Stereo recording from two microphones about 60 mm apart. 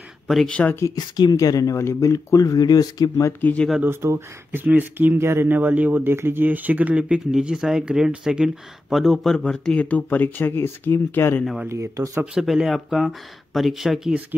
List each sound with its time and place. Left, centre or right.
0.5 s speech: left
0.7 s speech: left
1.8 s speech: left
3.8 s speech: right; by 8.5 s centre
8.9 s speech: centre; by 11.4 s left
11.7 s speech: right
12.4 s speech: centre